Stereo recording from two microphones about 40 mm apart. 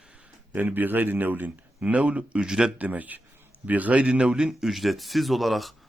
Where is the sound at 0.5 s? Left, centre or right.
Right.